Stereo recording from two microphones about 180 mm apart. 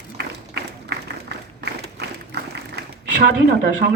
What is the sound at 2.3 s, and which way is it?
Applause, 70° right (ahead or behind).